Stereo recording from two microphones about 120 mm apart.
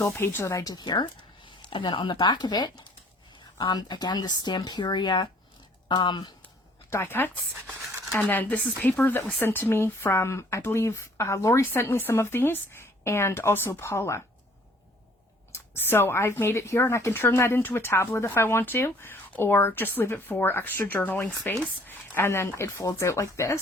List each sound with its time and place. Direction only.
0.0 s speech: 15° left (ahead or behind); by 6.3 s 40° left (ahead or behind)
6.9 s speech: 20° left (ahead or behind)
15.5 s speech: 20° left (ahead or behind)